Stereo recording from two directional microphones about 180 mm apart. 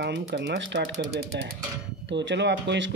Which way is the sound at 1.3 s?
65° right (ahead or behind).